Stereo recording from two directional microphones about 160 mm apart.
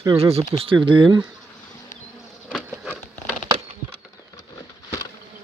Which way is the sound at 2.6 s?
10° right (ahead or behind).